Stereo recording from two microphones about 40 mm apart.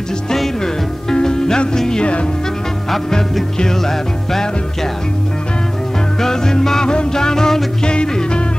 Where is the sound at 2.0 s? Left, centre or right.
Left.